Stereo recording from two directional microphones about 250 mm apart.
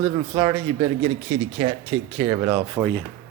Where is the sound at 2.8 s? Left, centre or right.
Centre.